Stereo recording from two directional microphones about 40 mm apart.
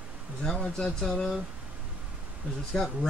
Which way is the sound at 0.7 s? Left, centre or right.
Centre.